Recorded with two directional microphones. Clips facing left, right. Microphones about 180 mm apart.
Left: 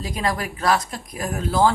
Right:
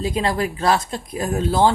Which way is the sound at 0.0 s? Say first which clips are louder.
Right 4 dB; 25° right (ahead or behind).